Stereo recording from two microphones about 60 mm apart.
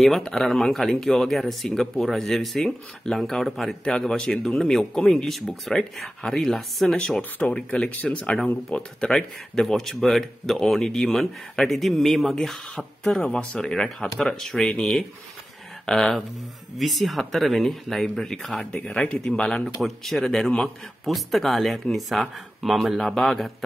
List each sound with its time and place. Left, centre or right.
0.0 s speech: centre
7.2 s speech: left; by 14.7 s centre
15.9 s speech: centre
18.6 s speech: left
19.8 s speech: centre